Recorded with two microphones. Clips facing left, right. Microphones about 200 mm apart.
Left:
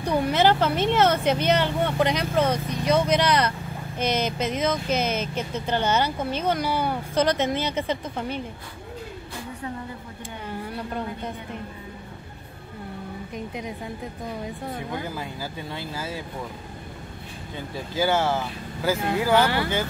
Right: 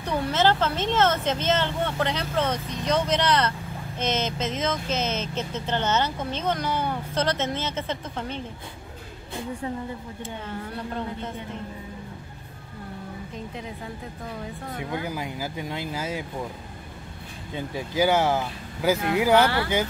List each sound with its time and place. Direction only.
0.0 s speech: 15° left (ahead or behind)
10.6 s speech: 10° left (ahead or behind)
14.9 s speech: 15° right (ahead or behind)
17.6 s speech: 15° right (ahead or behind)